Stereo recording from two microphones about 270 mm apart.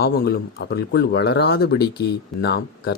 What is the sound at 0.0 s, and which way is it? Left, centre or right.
Speech, left.